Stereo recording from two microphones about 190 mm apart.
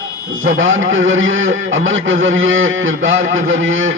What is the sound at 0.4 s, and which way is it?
A man's voice, 90° right.